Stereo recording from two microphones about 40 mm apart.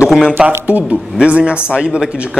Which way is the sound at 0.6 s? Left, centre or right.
Right.